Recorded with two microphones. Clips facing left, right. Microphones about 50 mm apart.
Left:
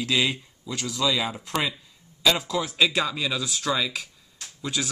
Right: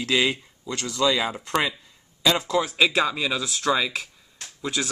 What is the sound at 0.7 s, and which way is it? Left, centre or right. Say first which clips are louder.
Speech: right 1 dB; centre.